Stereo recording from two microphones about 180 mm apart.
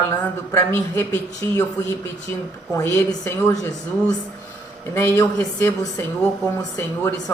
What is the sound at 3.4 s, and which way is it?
Speech, 15° left (ahead or behind).